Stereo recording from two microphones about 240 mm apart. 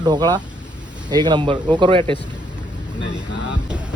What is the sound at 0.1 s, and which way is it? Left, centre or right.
Speech, centre.